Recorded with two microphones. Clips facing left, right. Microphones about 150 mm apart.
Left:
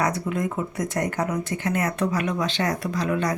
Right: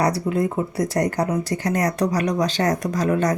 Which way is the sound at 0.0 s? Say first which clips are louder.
Right 4 dB; 35° right (ahead or behind).